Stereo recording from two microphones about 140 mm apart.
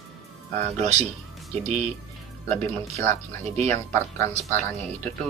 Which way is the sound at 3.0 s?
50° right (ahead or behind).